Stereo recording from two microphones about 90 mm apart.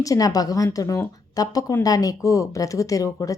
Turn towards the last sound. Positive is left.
turn(degrees=40)  # may be behind; listen again after turning